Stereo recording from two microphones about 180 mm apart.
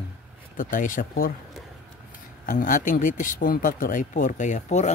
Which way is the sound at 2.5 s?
45° left (ahead or behind).